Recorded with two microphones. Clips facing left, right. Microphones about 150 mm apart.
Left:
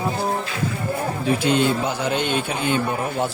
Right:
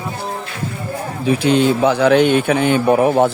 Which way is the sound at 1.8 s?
80° right.